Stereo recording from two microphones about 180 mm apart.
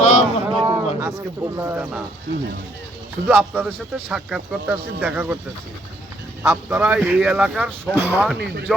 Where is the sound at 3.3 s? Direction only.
10° right (ahead or behind).